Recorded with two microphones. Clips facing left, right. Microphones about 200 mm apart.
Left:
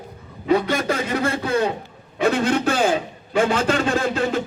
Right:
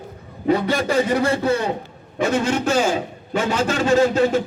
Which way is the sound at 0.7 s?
50° left (ahead or behind).